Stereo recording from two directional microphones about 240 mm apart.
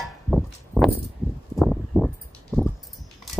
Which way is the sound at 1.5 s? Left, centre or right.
Centre.